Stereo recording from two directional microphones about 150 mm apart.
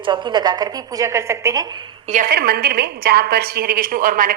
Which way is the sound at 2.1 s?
75° right (ahead or behind).